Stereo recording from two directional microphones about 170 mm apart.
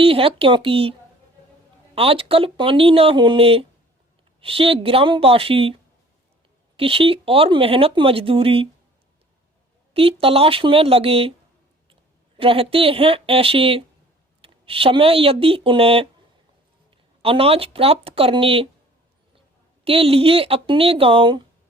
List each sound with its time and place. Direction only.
0.0 s speech: 30° right (ahead or behind)
2.0 s speech: 35° right (ahead or behind)
6.7 s speech: 35° right (ahead or behind)
9.9 s speech: 35° right (ahead or behind)
12.4 s speech: 35° right (ahead or behind)
17.2 s speech: 35° right (ahead or behind)
19.8 s speech: 35° right (ahead or behind)